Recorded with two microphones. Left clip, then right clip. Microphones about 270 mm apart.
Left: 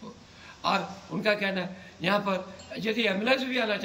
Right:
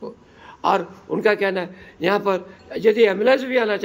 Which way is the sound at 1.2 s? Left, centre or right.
Centre.